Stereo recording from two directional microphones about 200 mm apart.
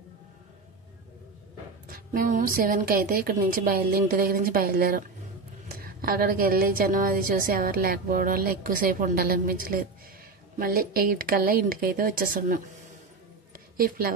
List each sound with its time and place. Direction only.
1.9 s a woman's voice: 40° right (ahead or behind)
13.7 s a woman's voice: 45° right (ahead or behind)